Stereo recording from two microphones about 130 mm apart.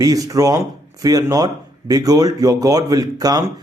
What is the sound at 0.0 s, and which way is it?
A man's voice, 25° right (ahead or behind).